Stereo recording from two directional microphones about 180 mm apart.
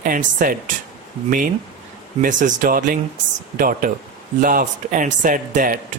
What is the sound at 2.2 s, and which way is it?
Speech, 50° right (ahead or behind).